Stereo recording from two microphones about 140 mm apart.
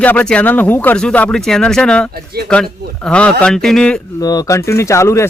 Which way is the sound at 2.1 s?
90° right.